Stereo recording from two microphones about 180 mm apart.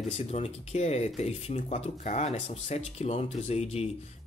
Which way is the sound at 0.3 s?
35° left (ahead or behind).